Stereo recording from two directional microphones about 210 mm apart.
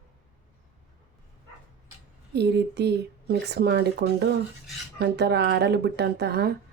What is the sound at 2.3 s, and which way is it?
Speech, 50° right (ahead or behind).